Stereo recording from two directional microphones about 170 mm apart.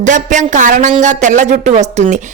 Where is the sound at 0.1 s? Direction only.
45° right (ahead or behind).